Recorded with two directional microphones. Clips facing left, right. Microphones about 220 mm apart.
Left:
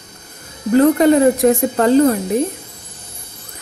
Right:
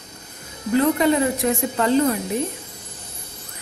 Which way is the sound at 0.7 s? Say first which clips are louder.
Left 7 dB; 45° left (ahead or behind).